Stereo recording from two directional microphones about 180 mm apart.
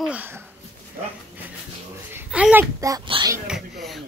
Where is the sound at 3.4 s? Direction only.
Centre (ahead or behind).